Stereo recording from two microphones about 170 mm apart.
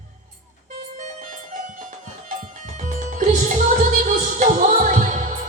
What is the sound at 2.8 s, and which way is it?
Music, 50° right (ahead or behind).